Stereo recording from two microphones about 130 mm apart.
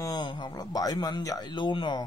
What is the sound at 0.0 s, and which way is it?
A man's voice, 35° left (ahead or behind).